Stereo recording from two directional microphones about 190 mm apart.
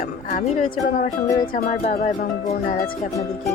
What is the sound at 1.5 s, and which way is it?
Music, 45° left (ahead or behind).